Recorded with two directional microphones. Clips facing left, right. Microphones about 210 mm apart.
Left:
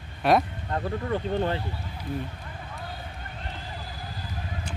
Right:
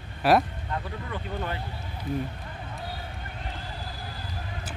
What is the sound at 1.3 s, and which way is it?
Speech, 30° left (ahead or behind).